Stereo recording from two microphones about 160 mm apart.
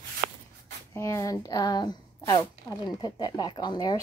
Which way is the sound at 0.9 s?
20° left (ahead or behind).